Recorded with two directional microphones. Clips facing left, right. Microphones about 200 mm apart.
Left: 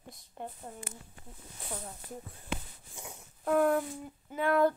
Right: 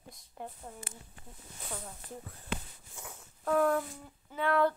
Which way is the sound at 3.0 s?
15° left (ahead or behind).